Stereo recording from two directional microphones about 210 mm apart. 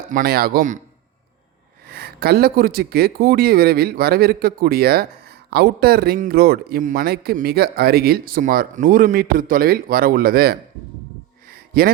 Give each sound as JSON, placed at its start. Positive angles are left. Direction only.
{"t": 0.1, "sound": "speech", "side_deg": -45}
{"t": 1.9, "sound": "speech", "side_deg": -50}
{"t": 11.5, "sound": "a sound", "side_deg": -45}